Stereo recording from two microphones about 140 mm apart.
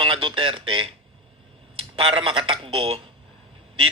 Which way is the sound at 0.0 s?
35° right (ahead or behind).